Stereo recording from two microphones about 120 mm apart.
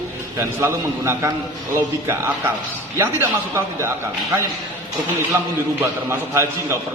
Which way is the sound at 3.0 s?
15° right (ahead or behind).